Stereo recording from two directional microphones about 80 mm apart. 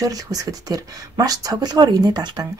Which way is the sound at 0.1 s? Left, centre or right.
Right.